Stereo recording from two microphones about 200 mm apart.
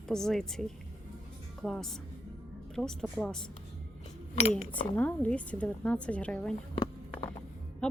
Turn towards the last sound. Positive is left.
turn(degrees=5)  # may be behind; listen again after turning